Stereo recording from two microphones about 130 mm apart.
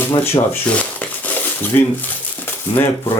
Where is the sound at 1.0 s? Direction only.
15° left (ahead or behind).